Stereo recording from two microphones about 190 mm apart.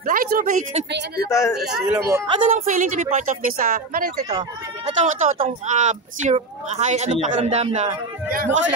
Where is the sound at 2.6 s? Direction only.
45° right (ahead or behind).